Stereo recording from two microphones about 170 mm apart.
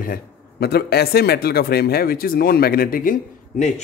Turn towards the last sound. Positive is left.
turn(degrees=50)  # may be behind; listen again after turning